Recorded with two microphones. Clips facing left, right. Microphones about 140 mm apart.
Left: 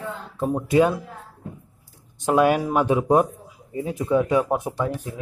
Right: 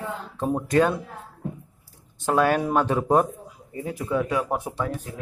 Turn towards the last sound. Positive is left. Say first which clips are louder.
# left 3 dB
turn(degrees=15)  # may be behind; listen again after turning